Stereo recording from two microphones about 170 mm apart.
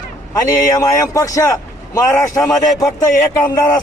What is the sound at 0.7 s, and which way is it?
Speech, 20° left (ahead or behind).